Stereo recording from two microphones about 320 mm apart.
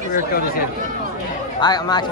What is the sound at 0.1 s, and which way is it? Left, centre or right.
Speech, left.